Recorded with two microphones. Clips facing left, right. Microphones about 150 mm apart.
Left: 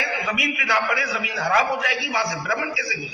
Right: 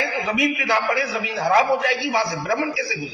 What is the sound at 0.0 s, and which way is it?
A man's voice, 30° right (ahead or behind).